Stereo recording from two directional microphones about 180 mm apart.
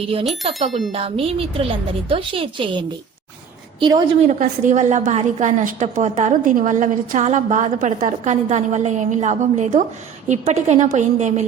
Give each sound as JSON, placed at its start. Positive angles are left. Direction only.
{"t": 0.9, "sound": "a woman's voice", "side_deg": -30}
{"t": 4.2, "sound": "a woman's voice", "side_deg": -45}